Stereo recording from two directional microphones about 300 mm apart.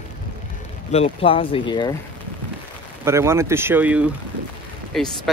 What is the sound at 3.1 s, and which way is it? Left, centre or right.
Speech, centre.